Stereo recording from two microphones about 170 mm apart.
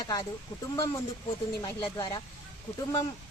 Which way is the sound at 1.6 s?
25° left (ahead or behind).